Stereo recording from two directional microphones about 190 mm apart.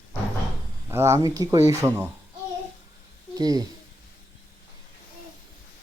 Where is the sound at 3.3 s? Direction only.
20° right (ahead or behind).